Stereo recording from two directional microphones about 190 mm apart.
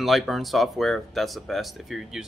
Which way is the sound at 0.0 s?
Centre (ahead or behind).